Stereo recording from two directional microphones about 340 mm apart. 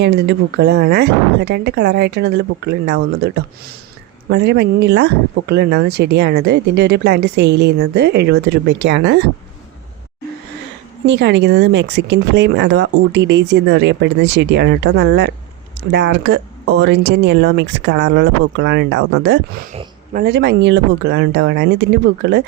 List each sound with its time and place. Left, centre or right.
0.0 s speech: right
11.0 s speech: right